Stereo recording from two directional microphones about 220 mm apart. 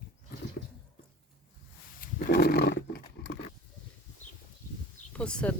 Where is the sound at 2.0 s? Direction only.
40° left (ahead or behind).